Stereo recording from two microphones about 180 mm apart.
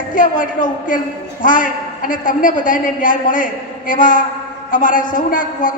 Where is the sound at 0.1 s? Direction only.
45° left (ahead or behind).